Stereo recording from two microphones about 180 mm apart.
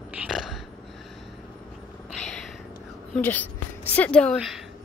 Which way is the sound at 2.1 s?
5° left (ahead or behind).